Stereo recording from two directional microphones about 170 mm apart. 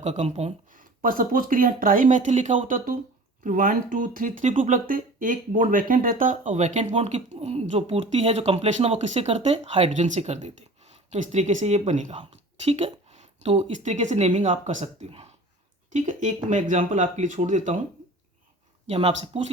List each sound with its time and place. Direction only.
0.0 s speech: 40° right (ahead or behind)
18.9 s speech: 35° right (ahead or behind)